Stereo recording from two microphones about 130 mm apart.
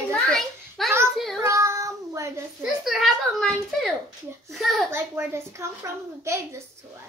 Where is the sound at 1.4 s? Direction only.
20° right (ahead or behind).